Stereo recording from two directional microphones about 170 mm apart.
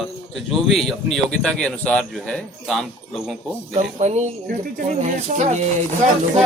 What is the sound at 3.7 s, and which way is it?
Speech, 40° right (ahead or behind).